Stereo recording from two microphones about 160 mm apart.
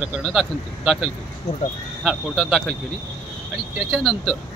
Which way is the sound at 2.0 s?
Centre (ahead or behind).